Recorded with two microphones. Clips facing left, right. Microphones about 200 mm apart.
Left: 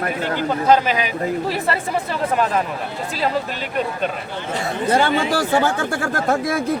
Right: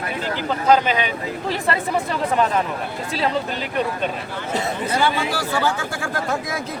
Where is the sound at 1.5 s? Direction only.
5° left (ahead or behind).